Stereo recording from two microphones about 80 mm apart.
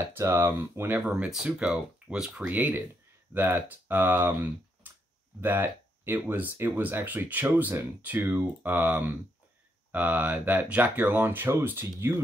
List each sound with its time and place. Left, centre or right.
0.1 s speech: right
1.3 s speech: centre; by 12.1 s right